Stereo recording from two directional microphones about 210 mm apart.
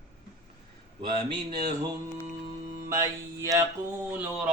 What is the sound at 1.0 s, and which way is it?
Speech, 20° right (ahead or behind).